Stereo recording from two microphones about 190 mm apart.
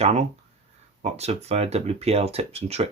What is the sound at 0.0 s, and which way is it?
Speech, 35° right (ahead or behind).